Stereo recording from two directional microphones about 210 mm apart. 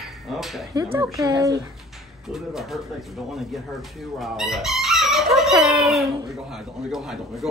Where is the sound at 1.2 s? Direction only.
20° right (ahead or behind).